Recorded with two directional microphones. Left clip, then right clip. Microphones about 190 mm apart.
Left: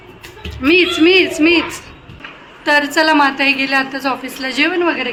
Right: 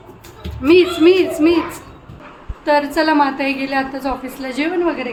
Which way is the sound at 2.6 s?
Centre (ahead or behind).